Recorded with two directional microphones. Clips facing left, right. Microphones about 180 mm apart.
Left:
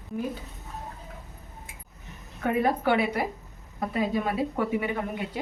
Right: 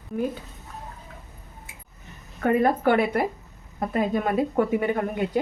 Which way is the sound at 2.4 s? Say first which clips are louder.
Right 4 dB; 50° right (ahead or behind).